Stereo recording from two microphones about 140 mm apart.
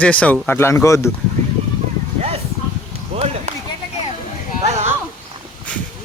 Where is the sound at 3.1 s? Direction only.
50° right (ahead or behind).